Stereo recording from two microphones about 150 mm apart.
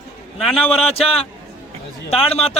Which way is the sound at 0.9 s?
40° left (ahead or behind).